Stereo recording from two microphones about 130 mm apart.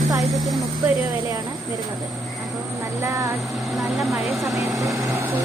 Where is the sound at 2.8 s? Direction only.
20° right (ahead or behind).